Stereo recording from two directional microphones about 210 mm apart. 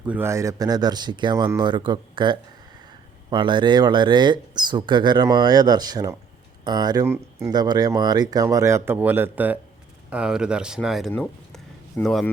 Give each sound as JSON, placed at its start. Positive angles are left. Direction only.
{"t": 0.0, "sound": "speech", "side_deg": -10}